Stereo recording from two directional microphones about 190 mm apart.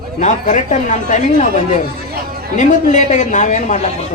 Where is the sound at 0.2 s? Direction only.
40° left (ahead or behind).